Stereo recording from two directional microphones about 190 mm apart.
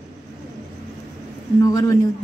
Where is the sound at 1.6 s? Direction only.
20° left (ahead or behind).